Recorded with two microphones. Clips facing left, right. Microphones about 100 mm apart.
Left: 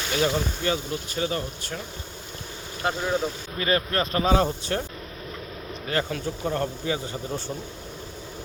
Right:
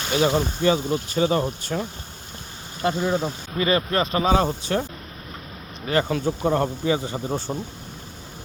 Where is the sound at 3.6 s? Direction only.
25° right (ahead or behind); by 4.8 s 10° right (ahead or behind).